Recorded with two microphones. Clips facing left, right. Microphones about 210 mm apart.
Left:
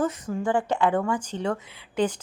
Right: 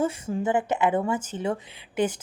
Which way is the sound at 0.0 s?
25° right (ahead or behind).